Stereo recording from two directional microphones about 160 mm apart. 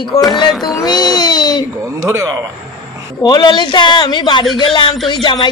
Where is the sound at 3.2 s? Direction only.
25° left (ahead or behind).